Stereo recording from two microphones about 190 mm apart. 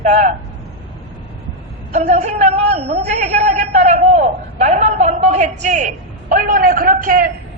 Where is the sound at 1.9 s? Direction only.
40° right (ahead or behind).